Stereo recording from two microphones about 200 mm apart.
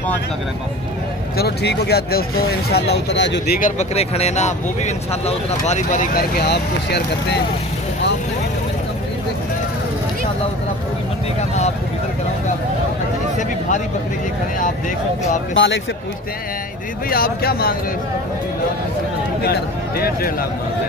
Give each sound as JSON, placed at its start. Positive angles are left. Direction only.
{"t": 1.3, "sound": "speech", "side_deg": 55}
{"t": 3.5, "sound": "speech", "side_deg": 40}
{"t": 15.5, "sound": "speech", "side_deg": 65}
{"t": 17.1, "sound": "speech", "side_deg": 50}
{"t": 20.0, "sound": "speech", "side_deg": 45}